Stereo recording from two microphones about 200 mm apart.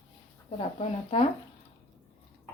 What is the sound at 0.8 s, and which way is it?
Speech, 30° left (ahead or behind).